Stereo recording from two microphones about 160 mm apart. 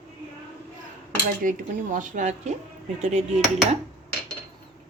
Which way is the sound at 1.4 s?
55° right (ahead or behind).